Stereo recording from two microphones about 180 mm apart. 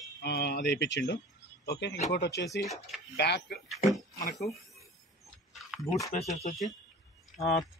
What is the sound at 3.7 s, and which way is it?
Speech, centre (ahead or behind).